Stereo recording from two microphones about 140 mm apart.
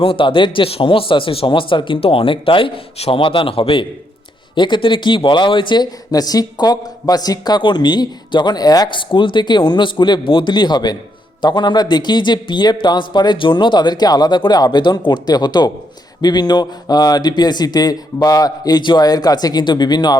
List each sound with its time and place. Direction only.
0.0 s speech: 40° left (ahead or behind)